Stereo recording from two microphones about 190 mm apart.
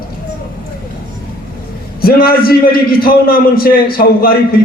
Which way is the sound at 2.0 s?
50° left (ahead or behind).